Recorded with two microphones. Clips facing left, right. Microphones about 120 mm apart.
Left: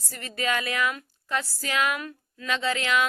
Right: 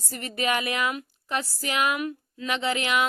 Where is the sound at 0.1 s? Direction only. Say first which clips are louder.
Right 2 dB; 20° right (ahead or behind).